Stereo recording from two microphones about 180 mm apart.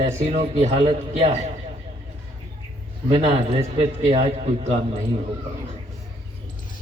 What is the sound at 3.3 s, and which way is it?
A man's voice, 35° right (ahead or behind).